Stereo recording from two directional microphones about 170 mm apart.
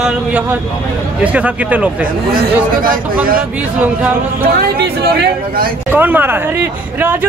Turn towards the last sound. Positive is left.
turn(degrees=-10)  # may be behind; listen again after turning